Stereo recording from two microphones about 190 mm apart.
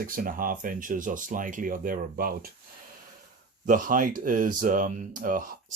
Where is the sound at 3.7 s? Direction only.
45° right (ahead or behind).